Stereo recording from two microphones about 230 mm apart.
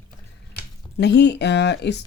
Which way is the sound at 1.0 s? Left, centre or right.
Left.